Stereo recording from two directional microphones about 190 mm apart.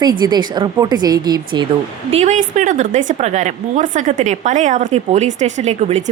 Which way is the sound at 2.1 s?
40° right (ahead or behind).